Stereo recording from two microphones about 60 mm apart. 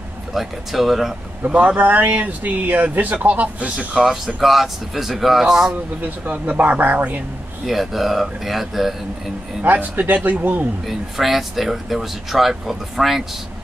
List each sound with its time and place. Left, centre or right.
0.3 s speech: centre
1.4 s speech: right
3.7 s speech: centre
6.0 s speech: right
7.6 s speech: centre
9.6 s speech: right
10.9 s speech: centre